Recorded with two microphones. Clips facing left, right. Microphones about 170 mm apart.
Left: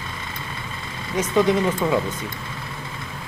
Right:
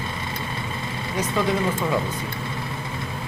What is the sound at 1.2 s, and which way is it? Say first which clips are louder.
Speech: left 4 dB; 20° left (ahead or behind).